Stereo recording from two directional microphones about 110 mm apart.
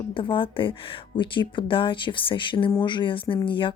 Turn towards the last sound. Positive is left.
turn(degrees=50)  # may be behind; listen again after turning